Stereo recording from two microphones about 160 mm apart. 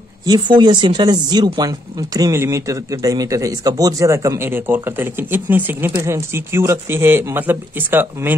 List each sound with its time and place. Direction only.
0.2 s speech: 25° right (ahead or behind)